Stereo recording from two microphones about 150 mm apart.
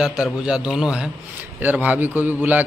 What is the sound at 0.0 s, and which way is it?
A man's voice, 5° right (ahead or behind).